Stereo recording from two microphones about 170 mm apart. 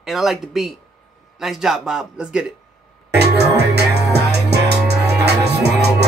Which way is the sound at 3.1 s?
75° right (ahead or behind).